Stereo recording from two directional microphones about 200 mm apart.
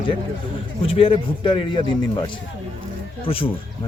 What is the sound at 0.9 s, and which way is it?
Speech, 25° left (ahead or behind).